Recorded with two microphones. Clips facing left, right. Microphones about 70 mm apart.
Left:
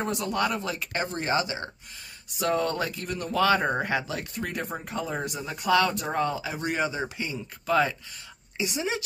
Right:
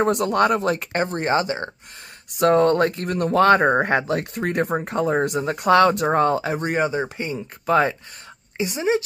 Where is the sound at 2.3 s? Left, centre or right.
Right.